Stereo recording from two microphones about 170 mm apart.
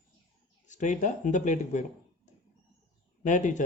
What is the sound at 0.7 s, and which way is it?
Speech, 45° left (ahead or behind).